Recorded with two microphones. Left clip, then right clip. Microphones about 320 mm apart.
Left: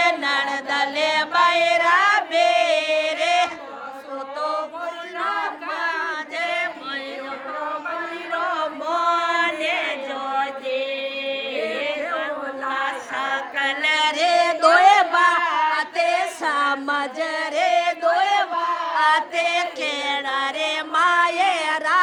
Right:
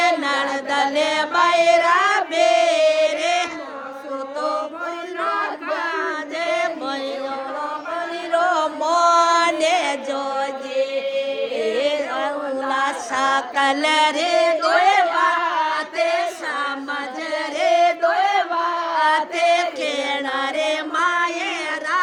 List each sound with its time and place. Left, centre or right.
0.0 s music: centre
5.7 s chant: centre
8.4 s female singing: centre
11.8 s chant: centre
14.6 s a sound: centre
15.8 s singing: centre
18.9 s music: centre